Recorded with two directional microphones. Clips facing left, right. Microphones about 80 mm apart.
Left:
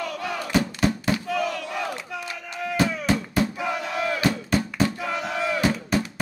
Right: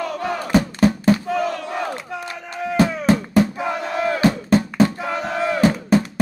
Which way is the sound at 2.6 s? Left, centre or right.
Right.